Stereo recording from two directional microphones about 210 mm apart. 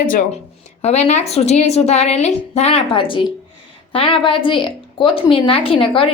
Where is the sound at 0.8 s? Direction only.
30° left (ahead or behind).